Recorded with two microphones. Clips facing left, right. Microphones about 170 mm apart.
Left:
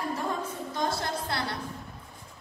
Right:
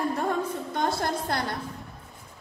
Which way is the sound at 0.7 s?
55° right (ahead or behind).